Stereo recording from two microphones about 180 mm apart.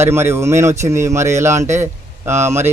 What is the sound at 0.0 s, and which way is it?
Speech, 15° right (ahead or behind).